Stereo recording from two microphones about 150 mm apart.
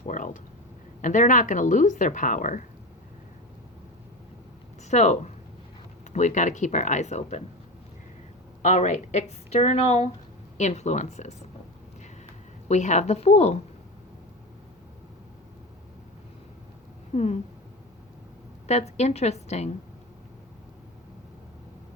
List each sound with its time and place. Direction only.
1.0 s a woman's voice: 60° left (ahead or behind)
4.8 s a woman's voice: 50° left (ahead or behind)
8.6 s a woman's voice: 50° left (ahead or behind)
12.6 s a woman's voice: 50° left (ahead or behind)
17.2 s a woman's voice: 50° left (ahead or behind)
18.7 s a woman's voice: 50° left (ahead or behind)